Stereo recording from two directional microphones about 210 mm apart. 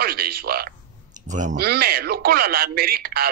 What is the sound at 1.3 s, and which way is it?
Speech, 35° right (ahead or behind).